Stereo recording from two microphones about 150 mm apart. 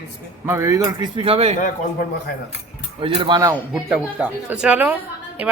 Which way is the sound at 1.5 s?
60° left (ahead or behind).